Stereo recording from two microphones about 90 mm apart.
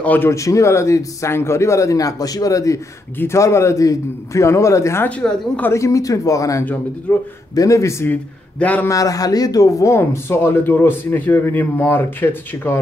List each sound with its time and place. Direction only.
0.0 s speech: 15° left (ahead or behind)
0.3 s speech: 35° left (ahead or behind)
5.0 s a woman's voice: 15° left (ahead or behind)
5.7 s speech: 35° left (ahead or behind)
6.6 s speech: 20° left (ahead or behind)
7.5 s speech: 35° left (ahead or behind)
8.1 s a man's voice: 15° left (ahead or behind)
8.8 s speech: 40° left (ahead or behind); by 12.7 s 25° left (ahead or behind)